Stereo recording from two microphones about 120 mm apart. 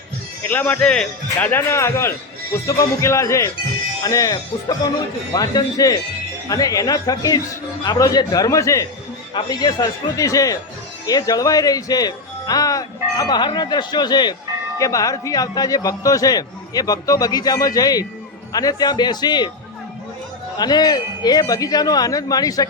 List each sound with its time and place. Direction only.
0.4 s a man's voice: 15° left (ahead or behind); by 19.5 s 35° left (ahead or behind)
20.6 s speech: 35° left (ahead or behind)